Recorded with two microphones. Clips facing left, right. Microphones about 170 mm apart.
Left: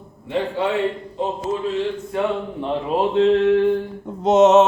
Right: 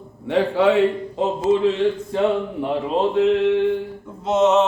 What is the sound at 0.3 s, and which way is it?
Speech, 85° right.